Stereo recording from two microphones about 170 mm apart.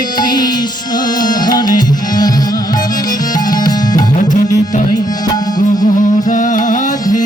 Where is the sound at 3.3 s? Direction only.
25° left (ahead or behind).